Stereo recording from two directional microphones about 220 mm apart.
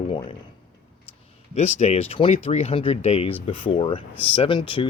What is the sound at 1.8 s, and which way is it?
Speech, 30° left (ahead or behind).